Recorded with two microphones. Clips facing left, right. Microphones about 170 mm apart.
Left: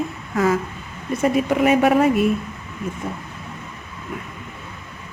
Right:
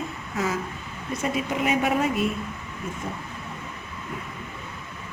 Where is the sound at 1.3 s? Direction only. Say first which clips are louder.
Left 7 dB; 55° left (ahead or behind).